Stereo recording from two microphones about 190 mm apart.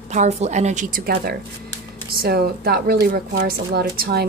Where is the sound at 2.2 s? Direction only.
55° right (ahead or behind).